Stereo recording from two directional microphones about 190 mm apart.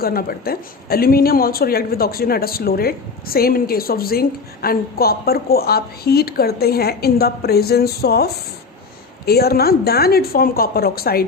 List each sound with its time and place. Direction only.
0.0 s speech: 50° left (ahead or behind)